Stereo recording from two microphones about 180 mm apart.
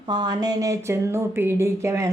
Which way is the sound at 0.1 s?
20° right (ahead or behind).